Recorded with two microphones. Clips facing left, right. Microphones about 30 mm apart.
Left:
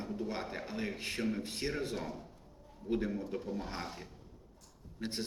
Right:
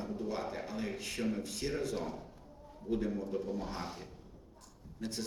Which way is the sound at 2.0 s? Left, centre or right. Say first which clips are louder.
Right 1 dB; centre.